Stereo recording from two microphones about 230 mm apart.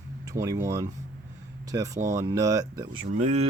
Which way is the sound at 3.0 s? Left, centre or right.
Right.